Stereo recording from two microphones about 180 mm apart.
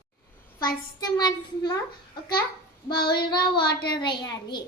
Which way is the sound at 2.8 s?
25° left (ahead or behind).